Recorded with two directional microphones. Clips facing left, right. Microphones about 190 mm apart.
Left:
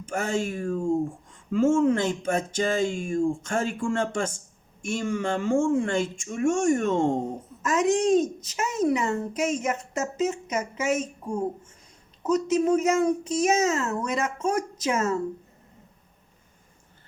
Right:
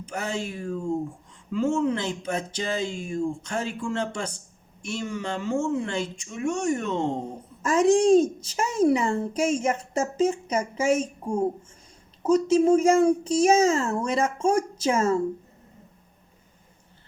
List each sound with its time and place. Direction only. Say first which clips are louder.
0.0 s speech: left 3 dB; 50° left (ahead or behind)
7.6 s a child's voice: right 3 dB; 30° right (ahead or behind)